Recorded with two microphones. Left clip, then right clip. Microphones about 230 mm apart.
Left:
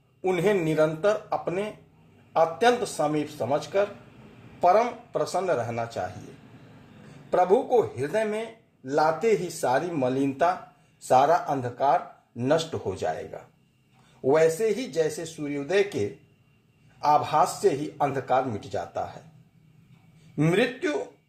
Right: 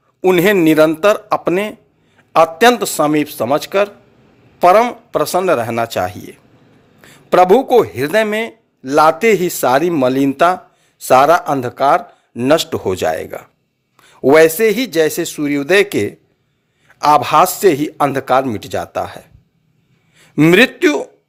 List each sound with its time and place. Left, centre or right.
0.2 s speech: right
7.3 s speech: right
20.3 s speech: right